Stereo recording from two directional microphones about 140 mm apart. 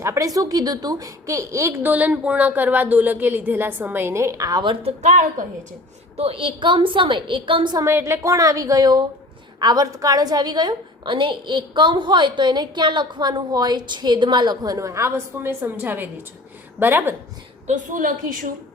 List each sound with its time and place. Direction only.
0.0 s speech: 25° right (ahead or behind)
5.0 s a woman's voice: 65° right (ahead or behind)
6.1 s a woman's voice: 40° right (ahead or behind)
7.9 s a woman's voice: 20° right (ahead or behind)
17.7 s a woman's voice: 70° right (ahead or behind)